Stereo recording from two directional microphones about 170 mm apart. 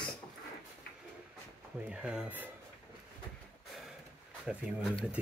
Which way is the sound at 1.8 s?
5° right (ahead or behind).